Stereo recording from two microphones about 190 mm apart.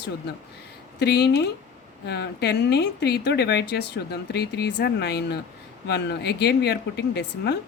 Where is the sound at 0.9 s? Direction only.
60° left (ahead or behind).